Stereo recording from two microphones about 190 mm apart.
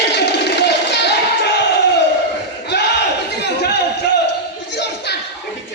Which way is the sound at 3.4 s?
60° left (ahead or behind).